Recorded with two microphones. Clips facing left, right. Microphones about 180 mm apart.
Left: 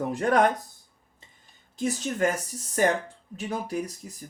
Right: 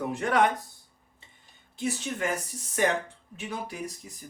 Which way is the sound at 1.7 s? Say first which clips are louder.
Left 3 dB; 40° left (ahead or behind).